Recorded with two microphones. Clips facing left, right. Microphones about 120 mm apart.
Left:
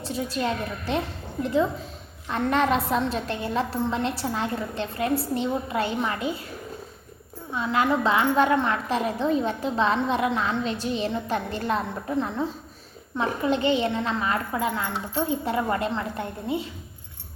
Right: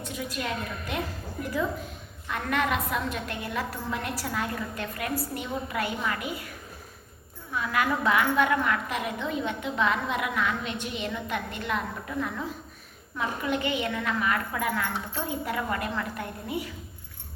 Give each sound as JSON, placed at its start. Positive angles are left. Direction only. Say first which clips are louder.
{"t": 0.0, "sound": "a woman's voice", "louder": "left 6 dB", "side_deg": 30}
{"t": 7.5, "sound": "a woman's voice", "louder": "left 4 dB", "side_deg": 25}